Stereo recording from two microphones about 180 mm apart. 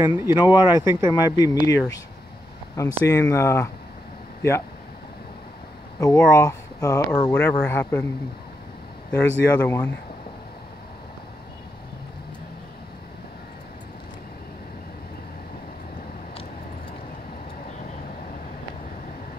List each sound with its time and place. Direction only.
0.0 s speech: 15° right (ahead or behind)
1.1 s speech: 20° left (ahead or behind)
5.9 s speech: 15° left (ahead or behind)
9.1 s speech: 10° left (ahead or behind)